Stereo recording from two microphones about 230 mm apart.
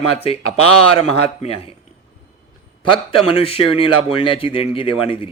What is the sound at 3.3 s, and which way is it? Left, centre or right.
A man's voice, left.